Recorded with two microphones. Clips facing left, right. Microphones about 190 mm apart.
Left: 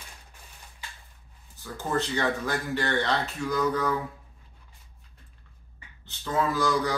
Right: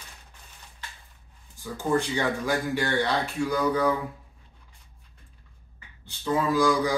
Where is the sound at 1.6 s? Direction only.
10° right (ahead or behind).